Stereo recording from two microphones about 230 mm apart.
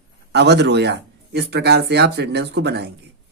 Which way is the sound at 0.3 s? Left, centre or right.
Right.